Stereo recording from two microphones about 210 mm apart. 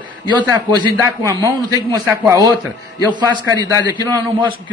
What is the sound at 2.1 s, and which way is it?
A man's voice, 15° right (ahead or behind).